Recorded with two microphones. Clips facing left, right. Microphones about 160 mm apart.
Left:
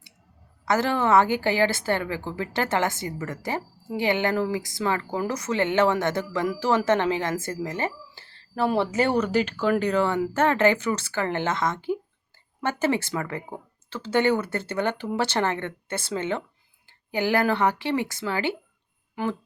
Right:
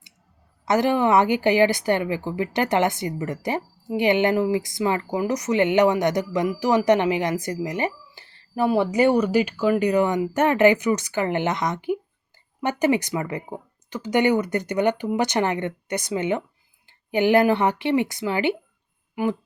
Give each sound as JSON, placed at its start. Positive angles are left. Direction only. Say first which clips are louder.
{"t": 0.6, "sound": "a woman's voice", "louder": "right 4 dB", "side_deg": -20}